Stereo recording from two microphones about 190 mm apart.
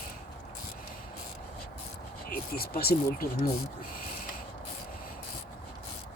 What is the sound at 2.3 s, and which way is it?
Speech, 50° left (ahead or behind).